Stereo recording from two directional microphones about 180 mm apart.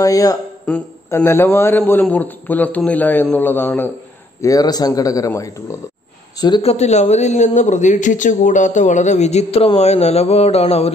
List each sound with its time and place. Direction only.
0.0 s a man's voice: 20° left (ahead or behind)
6.4 s a man's voice: 30° left (ahead or behind)